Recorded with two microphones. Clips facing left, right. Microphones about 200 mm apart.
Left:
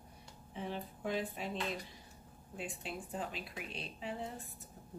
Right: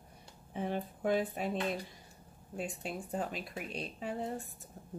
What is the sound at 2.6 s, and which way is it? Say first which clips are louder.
Speech: right 4 dB; 45° right (ahead or behind).